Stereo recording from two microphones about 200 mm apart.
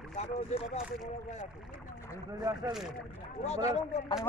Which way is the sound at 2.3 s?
20° right (ahead or behind).